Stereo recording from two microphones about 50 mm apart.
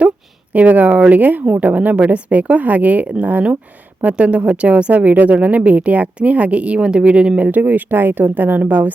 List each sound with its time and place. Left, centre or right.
0.5 s a woman's voice: right